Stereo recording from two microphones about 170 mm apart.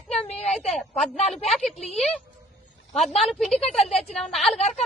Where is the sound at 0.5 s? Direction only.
Centre (ahead or behind).